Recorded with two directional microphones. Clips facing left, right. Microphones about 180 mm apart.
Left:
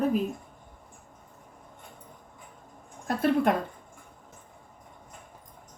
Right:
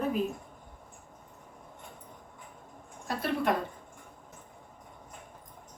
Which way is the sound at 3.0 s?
50° left (ahead or behind).